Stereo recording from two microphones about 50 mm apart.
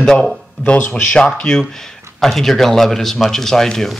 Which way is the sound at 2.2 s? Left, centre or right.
Centre.